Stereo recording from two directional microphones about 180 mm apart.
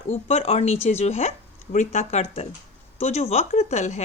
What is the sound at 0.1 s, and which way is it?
A woman's voice, 35° left (ahead or behind).